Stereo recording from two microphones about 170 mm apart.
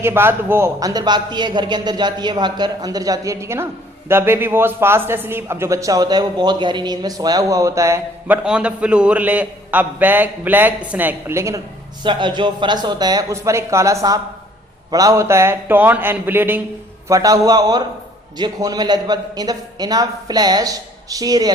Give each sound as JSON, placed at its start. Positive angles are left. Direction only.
{"t": 0.0, "sound": "a man's voice", "side_deg": -15}
{"t": 8.4, "sound": "a man's voice", "side_deg": -5}
{"t": 12.0, "sound": "a man's voice", "side_deg": -30}